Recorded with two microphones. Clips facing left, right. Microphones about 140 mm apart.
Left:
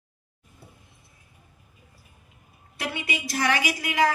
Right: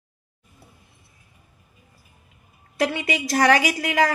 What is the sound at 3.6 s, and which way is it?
Speech, 45° right (ahead or behind).